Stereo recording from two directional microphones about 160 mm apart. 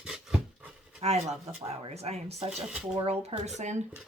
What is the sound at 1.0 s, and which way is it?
Speech, 45° right (ahead or behind).